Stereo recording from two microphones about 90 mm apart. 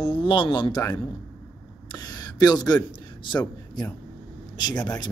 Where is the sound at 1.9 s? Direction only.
50° left (ahead or behind).